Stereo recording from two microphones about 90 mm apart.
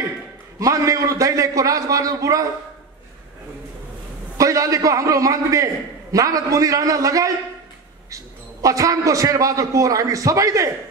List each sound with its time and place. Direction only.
0.6 s a man's voice: 35° right (ahead or behind)
4.4 s a man's voice: 35° right (ahead or behind)